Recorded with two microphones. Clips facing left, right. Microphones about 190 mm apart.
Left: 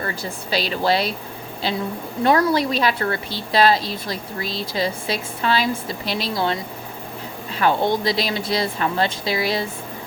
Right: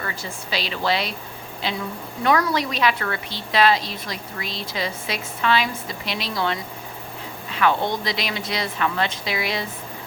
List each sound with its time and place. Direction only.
0.0 s a woman's voice: 35° left (ahead or behind)